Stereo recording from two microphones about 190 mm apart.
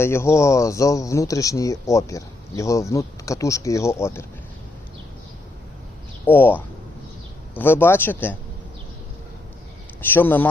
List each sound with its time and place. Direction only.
0.0 s speech: 15° left (ahead or behind)
6.2 s speech: 10° left (ahead or behind)
10.0 s speech: 10° left (ahead or behind)